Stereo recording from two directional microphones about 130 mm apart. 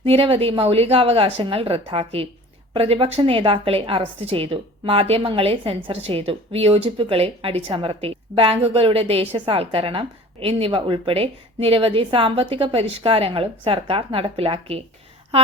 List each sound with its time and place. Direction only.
0.0 s a woman's voice: 45° right (ahead or behind)